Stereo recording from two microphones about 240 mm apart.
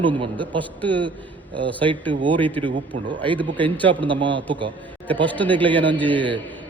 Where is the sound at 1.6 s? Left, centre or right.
Right.